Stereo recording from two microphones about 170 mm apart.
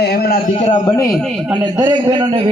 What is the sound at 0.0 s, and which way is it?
Speech, 65° left (ahead or behind).